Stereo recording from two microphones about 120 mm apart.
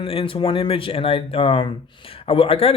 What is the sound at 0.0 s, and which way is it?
Speech, 50° left (ahead or behind).